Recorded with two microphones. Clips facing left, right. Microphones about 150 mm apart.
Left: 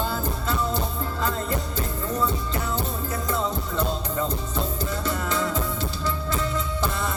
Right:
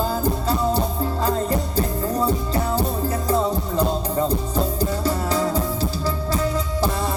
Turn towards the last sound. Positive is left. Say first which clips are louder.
# right 5 dB
turn(degrees=-35)  # may be behind; listen again after turning